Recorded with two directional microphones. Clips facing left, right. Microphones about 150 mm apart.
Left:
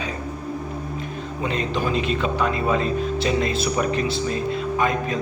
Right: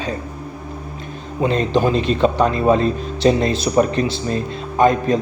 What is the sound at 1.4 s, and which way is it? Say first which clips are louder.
A man's voice: right 8 dB; 35° right (ahead or behind).